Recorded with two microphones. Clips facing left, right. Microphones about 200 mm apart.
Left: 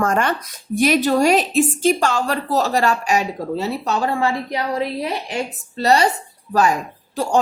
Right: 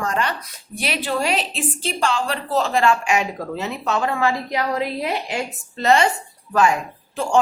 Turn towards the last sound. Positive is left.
turn(degrees=40)  # may be behind; listen again after turning